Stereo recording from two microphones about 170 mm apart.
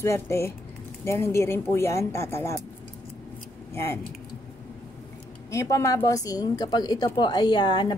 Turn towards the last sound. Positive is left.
turn(degrees=25)  # may be behind; listen again after turning